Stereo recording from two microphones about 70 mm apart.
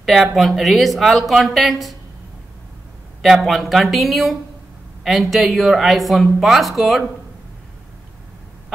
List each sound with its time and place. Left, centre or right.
0.0 s speech: centre
3.4 s speech: centre